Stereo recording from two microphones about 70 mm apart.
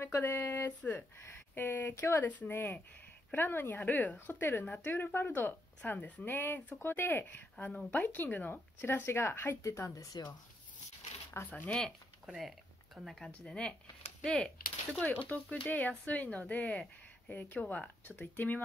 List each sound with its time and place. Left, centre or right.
0.2 s a woman's voice: left
9.6 s speech: left
11.5 s a woman's voice: left
12.4 s speech: centre
15.2 s a woman's voice: left